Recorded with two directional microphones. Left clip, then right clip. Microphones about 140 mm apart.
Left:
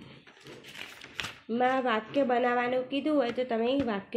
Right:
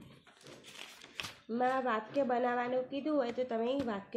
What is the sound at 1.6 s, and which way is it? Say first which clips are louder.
A woman's voice: left 5 dB; 25° left (ahead or behind).